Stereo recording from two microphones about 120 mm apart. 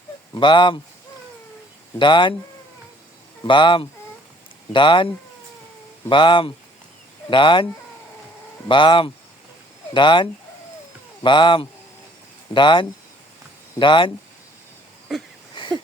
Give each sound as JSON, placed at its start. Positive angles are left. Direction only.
{"t": 0.3, "sound": "speech", "side_deg": 40}
{"t": 2.0, "sound": "speech", "side_deg": 40}
{"t": 3.4, "sound": "speech", "side_deg": 40}
{"t": 15.1, "sound": "wheeze", "side_deg": 0}
{"t": 15.6, "sound": "wheeze", "side_deg": 40}